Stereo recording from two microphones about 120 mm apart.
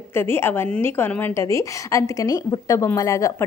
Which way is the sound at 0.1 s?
20° left (ahead or behind).